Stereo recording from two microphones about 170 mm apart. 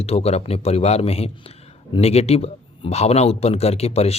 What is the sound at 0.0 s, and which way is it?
A man's voice, 35° left (ahead or behind).